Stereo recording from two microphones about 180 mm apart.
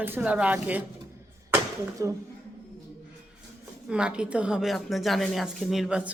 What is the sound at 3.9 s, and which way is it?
A woman's voice, 5° right (ahead or behind).